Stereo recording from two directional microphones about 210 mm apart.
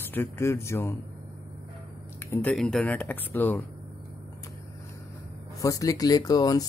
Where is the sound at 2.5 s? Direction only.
5° left (ahead or behind).